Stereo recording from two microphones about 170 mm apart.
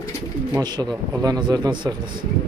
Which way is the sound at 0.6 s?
25° right (ahead or behind).